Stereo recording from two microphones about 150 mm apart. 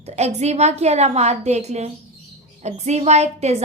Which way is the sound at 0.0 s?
45° right (ahead or behind).